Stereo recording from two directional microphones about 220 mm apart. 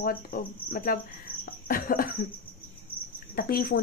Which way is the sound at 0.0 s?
40° left (ahead or behind).